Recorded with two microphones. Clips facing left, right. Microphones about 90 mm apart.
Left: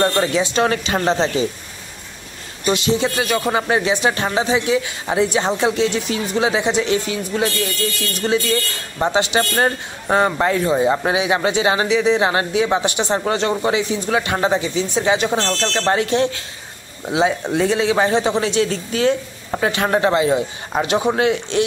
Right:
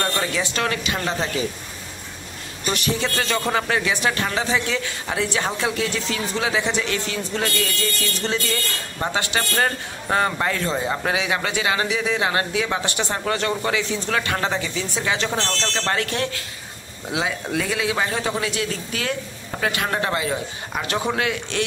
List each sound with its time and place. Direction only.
0.0 s a man's voice: 20° left (ahead or behind)
0.7 s a man's voice: 30° left (ahead or behind)
2.6 s a man's voice: 20° left (ahead or behind)